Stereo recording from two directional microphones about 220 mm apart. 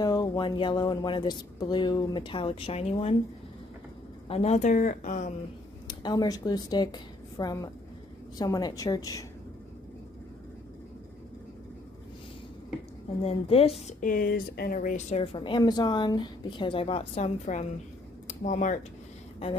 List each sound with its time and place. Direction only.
0.0 s speech: 15° left (ahead or behind)
4.3 s speech: 30° left (ahead or behind)
5.9 s a woman's voice: 20° left (ahead or behind)
13.2 s speech: 25° left (ahead or behind)